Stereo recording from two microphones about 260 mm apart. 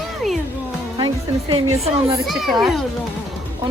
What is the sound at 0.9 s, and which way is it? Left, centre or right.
Speech, centre.